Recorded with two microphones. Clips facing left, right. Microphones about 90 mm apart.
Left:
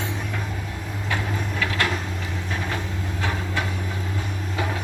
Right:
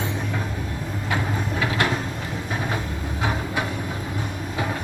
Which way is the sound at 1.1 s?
20° right (ahead or behind).